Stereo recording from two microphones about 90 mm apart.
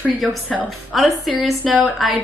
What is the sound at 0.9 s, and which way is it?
Speech, centre (ahead or behind).